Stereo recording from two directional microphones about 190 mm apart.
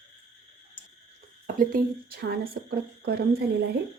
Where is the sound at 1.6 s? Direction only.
50° right (ahead or behind).